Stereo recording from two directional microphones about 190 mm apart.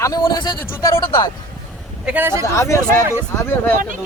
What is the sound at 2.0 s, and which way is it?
Speech, 10° right (ahead or behind).